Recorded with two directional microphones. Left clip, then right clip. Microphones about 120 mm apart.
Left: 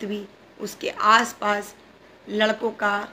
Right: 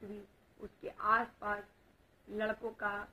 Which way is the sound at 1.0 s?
15° left (ahead or behind).